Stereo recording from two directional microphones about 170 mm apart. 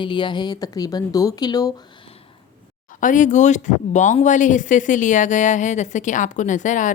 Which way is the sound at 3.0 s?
50° left (ahead or behind).